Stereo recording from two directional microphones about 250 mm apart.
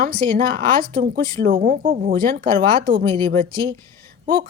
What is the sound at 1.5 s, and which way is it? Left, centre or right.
Speech, right.